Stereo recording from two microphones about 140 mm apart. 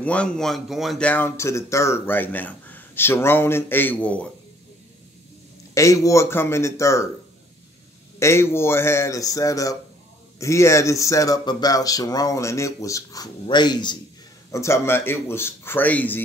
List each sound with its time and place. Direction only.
0.0 s speech: 10° left (ahead or behind)
5.8 s speech: 25° left (ahead or behind)
8.2 s speech: 20° left (ahead or behind)
14.5 s speech: 20° left (ahead or behind)